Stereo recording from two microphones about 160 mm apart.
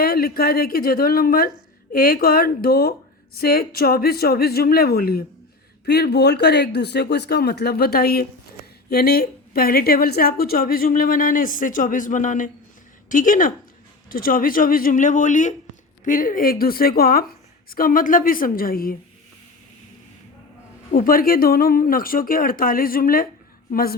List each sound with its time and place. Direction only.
0.0 s speech: 75° left (ahead or behind)
5.8 s a woman's voice: 90° left; by 18.9 s 65° left (ahead or behind)
20.9 s a woman's voice: 60° left (ahead or behind)